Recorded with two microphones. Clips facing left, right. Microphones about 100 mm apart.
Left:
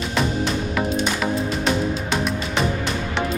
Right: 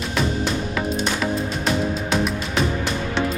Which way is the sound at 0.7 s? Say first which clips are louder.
Left 1 dB; centre (ahead or behind).